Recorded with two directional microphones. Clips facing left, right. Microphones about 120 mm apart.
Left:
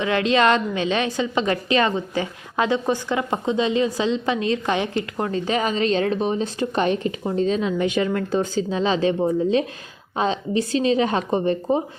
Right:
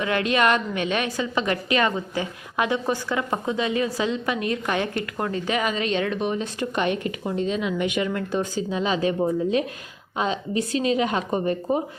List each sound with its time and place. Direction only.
0.0 s a woman's voice: 25° left (ahead or behind)
10.2 s a woman's voice: 30° left (ahead or behind)